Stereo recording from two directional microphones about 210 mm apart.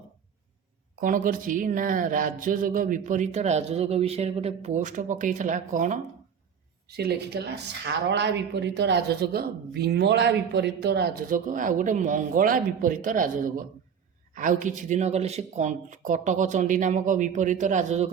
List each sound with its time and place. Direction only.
1.0 s speech: 40° right (ahead or behind)
6.8 s a woman's voice: 50° right (ahead or behind); by 18.1 s 35° right (ahead or behind)